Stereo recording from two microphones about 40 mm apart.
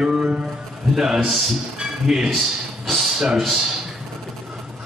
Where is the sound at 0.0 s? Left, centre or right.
Right.